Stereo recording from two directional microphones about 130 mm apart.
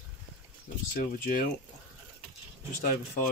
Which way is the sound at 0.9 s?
90° left.